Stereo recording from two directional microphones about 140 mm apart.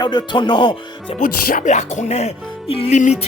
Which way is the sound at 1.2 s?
75° left (ahead or behind).